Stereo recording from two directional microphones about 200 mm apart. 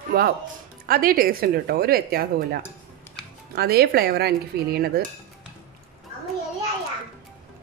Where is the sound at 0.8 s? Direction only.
45° right (ahead or behind).